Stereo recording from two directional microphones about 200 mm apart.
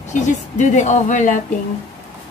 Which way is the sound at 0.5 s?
35° left (ahead or behind).